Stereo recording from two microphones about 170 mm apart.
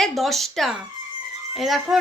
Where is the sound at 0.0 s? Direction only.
Centre (ahead or behind).